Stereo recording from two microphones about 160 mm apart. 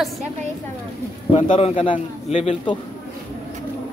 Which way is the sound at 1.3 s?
45° left (ahead or behind).